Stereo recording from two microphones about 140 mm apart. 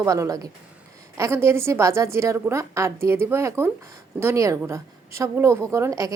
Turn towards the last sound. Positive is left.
turn(degrees=-25)  # may be behind; listen again after turning